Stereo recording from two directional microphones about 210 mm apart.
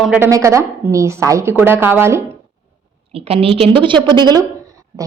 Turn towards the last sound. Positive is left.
turn(degrees=-15)  # may be behind; listen again after turning